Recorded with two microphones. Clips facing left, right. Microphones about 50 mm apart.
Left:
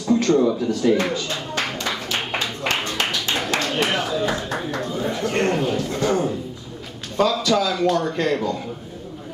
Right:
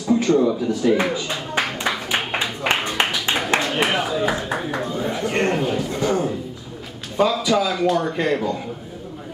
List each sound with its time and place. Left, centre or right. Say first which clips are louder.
0.0 s clapping: even; centre
7.2 s speech: right 1 dB; centre